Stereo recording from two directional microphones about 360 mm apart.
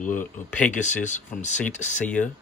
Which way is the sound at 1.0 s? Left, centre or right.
Centre.